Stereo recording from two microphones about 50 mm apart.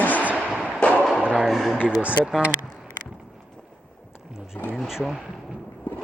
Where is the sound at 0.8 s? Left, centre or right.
Left.